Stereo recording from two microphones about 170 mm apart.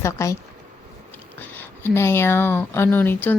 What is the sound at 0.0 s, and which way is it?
Speech, 15° left (ahead or behind).